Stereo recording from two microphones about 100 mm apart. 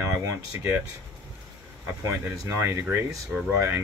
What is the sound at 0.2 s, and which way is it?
Speech, 30° right (ahead or behind).